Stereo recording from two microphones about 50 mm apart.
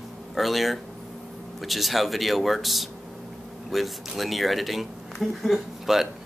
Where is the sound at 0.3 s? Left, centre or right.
Centre.